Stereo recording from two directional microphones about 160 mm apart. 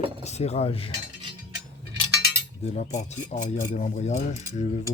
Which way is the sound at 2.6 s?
45° left (ahead or behind).